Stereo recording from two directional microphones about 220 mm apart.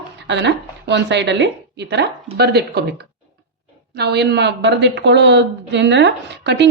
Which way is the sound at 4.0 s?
50° right (ahead or behind).